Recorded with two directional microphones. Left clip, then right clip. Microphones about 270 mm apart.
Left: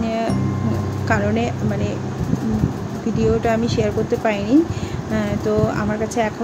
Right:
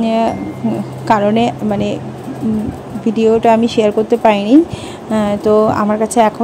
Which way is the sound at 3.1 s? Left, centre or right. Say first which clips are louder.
Right 8 dB; right.